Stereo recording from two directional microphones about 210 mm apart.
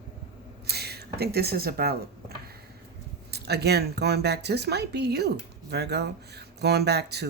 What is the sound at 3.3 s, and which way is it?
Speech, 50° right (ahead or behind).